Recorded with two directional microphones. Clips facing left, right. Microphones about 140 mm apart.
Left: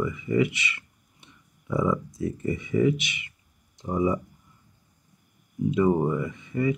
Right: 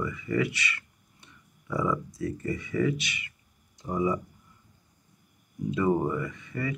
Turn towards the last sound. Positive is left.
turn(degrees=20)  # may be behind; listen again after turning